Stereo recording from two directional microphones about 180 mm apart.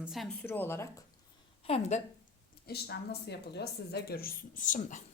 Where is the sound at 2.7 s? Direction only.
65° left (ahead or behind).